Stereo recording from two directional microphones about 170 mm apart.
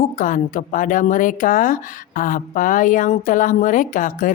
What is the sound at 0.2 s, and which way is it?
Speech, 50° left (ahead or behind).